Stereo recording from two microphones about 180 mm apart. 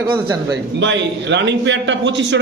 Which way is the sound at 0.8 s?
85° right.